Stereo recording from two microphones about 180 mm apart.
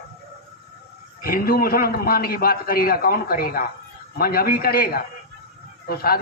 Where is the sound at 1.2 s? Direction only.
55° left (ahead or behind).